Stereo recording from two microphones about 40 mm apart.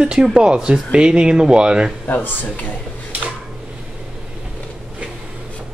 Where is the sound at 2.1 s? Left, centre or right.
Left.